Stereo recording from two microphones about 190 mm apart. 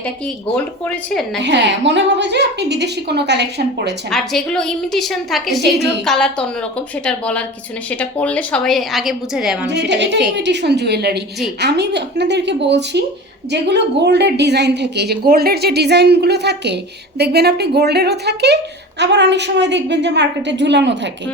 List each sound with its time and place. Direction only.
0.5 s speech: 5° left (ahead or behind)
1.4 s a woman's voice: 65° right (ahead or behind)
4.1 s a woman's voice: centre (ahead or behind)
9.6 s a woman's voice: 65° right (ahead or behind)